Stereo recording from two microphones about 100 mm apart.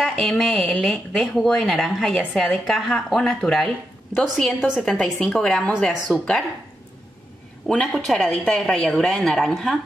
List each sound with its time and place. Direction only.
0.0 s a woman's voice: 5° left (ahead or behind)
4.9 s speech: 5° left (ahead or behind)
7.6 s a woman's voice: 5° left (ahead or behind)